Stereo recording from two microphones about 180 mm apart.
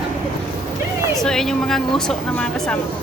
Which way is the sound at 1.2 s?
Centre (ahead or behind).